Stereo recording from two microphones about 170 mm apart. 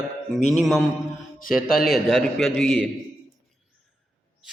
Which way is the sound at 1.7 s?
60° left (ahead or behind).